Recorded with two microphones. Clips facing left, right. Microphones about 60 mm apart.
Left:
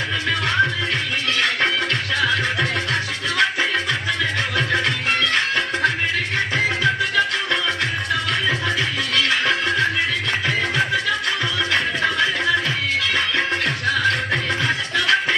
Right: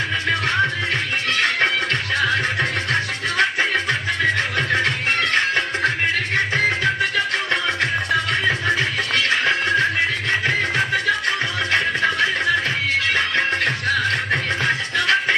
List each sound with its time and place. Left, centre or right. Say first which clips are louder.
1.3 s music: right 1 dB; right
8.3 s music: right 2 dB; right
13.1 s music: right 1 dB; right